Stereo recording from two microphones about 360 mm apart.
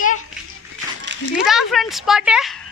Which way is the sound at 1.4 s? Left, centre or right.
Centre.